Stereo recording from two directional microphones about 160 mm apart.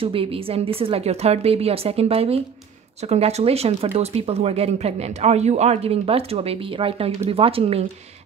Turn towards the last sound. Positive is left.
turn(degrees=-35)  # may be behind; listen again after turning